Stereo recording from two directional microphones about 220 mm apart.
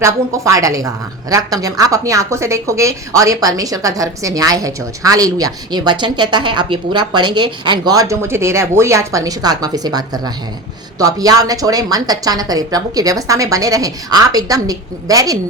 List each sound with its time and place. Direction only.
0.0 s speech: 15° right (ahead or behind)